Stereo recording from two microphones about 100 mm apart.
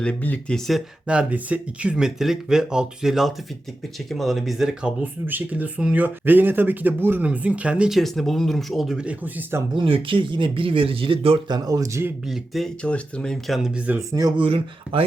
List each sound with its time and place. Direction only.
0.0 s speech: 15° left (ahead or behind)
1.0 s speech: 10° right (ahead or behind)
5.2 s speech: 20° right (ahead or behind)
9.0 s speech: 20° right (ahead or behind)
9.7 s speech: 60° right (ahead or behind)
11.4 s a man's voice: 40° right (ahead or behind)
12.3 s speech: centre (ahead or behind)
13.6 s speech: 15° right (ahead or behind)
14.1 s a man's voice: 40° right (ahead or behind)
14.3 s speech: 65° right (ahead or behind)